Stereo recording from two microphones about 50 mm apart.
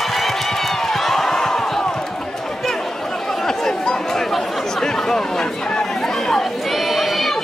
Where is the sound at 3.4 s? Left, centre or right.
Centre.